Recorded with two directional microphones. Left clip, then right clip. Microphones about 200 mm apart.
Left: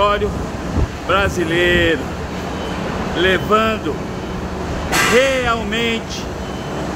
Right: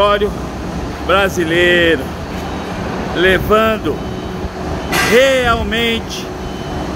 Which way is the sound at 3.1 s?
15° right (ahead or behind).